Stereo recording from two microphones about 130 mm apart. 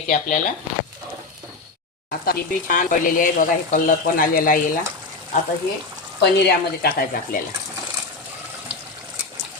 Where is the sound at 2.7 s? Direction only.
90° left.